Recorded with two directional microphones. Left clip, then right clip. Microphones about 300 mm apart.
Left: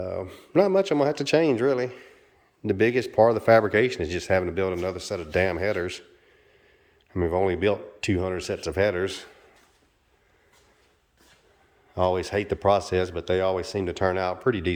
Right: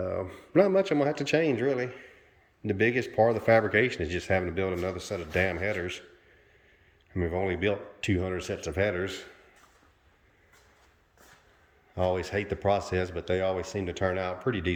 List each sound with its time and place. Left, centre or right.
0.0 s speech: centre
7.1 s speech: centre
11.9 s speech: centre